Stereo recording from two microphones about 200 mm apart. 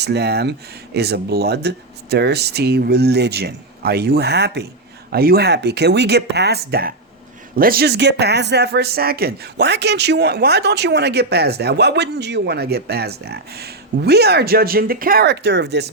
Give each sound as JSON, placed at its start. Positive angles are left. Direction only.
{"t": 0.0, "sound": "speech", "side_deg": -55}